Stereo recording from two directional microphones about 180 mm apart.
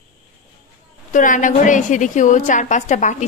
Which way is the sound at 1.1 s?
45° left (ahead or behind).